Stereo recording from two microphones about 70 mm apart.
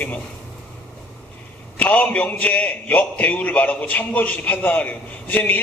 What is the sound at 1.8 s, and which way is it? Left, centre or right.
A man's voice, left.